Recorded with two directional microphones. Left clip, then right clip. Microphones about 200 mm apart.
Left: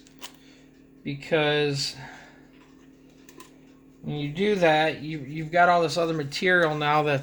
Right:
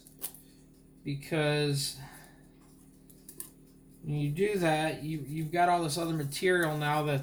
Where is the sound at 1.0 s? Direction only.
55° left (ahead or behind).